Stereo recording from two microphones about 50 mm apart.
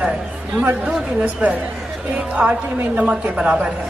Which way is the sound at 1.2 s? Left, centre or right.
Right.